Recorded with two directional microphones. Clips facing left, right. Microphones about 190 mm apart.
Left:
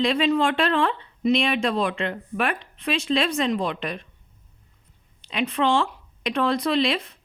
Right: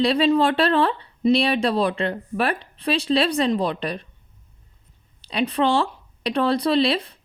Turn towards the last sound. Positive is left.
turn(degrees=-35)  # may be behind; listen again after turning